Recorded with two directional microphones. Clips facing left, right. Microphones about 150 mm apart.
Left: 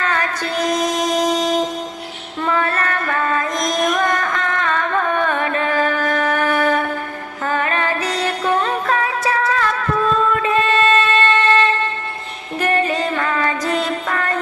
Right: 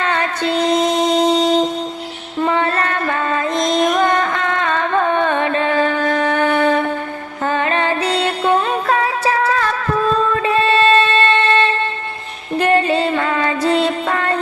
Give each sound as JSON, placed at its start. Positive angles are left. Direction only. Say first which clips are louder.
{"t": 0.0, "sound": "music", "louder": "right 3 dB", "side_deg": -25}